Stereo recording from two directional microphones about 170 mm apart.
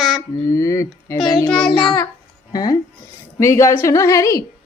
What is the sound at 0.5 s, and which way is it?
Speech, 20° left (ahead or behind).